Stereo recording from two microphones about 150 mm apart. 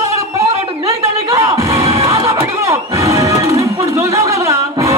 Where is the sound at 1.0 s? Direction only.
20° right (ahead or behind).